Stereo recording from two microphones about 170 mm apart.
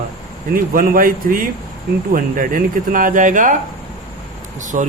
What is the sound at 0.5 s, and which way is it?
Speech, 55° right (ahead or behind).